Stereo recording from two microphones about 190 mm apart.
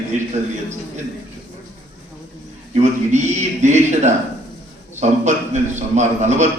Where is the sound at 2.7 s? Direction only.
40° right (ahead or behind).